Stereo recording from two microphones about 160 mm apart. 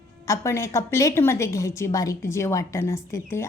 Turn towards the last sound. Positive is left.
turn(degrees=15)  # may be behind; listen again after turning